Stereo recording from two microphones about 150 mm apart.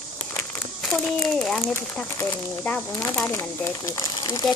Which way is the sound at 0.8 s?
5° left (ahead or behind).